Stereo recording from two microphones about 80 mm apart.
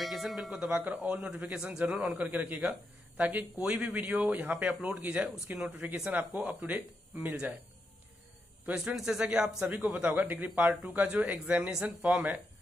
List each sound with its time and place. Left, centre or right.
0.0 s music: centre
0.6 s speech: centre
0.9 s speech: centre
8.8 s speech: centre